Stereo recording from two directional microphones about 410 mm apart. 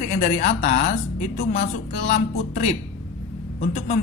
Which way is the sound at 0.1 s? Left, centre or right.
Centre.